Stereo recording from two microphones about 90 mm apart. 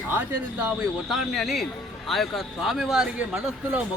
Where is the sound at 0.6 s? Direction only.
5° right (ahead or behind).